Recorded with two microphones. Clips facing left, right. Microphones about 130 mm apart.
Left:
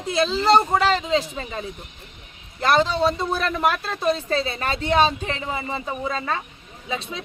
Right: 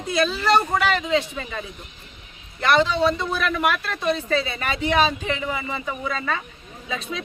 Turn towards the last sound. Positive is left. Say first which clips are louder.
# even
turn(degrees=30)  # may be behind; listen again after turning